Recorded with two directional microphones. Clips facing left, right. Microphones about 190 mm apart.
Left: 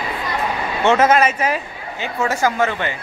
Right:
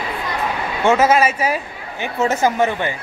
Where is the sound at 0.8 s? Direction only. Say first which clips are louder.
Even; 10° right (ahead or behind).